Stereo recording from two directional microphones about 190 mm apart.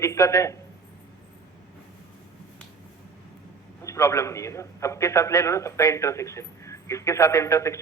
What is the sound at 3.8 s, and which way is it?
A man's voice, 15° left (ahead or behind).